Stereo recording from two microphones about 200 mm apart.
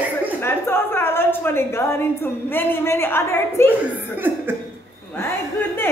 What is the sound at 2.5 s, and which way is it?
A woman's voice, 10° left (ahead or behind).